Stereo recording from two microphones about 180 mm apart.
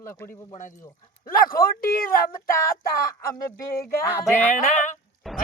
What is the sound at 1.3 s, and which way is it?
Speech, 50° left (ahead or behind).